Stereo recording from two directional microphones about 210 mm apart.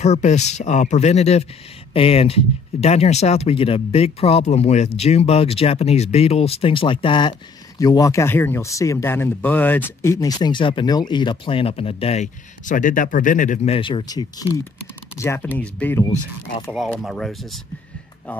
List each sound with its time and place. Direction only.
0.0 s speech: 35° left (ahead or behind)
13.7 s speech: 25° left (ahead or behind); by 17.6 s centre (ahead or behind)